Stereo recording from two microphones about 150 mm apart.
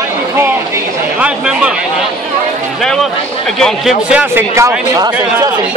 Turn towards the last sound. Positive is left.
turn(degrees=-25)  # may be behind; listen again after turning